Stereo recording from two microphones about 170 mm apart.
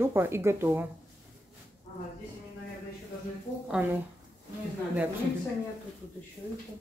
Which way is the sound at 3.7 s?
10° right (ahead or behind).